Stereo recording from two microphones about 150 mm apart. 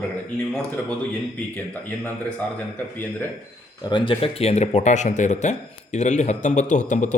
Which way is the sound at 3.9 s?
35° left (ahead or behind).